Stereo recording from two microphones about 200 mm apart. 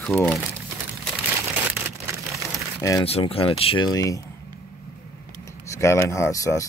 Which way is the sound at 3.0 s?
30° left (ahead or behind).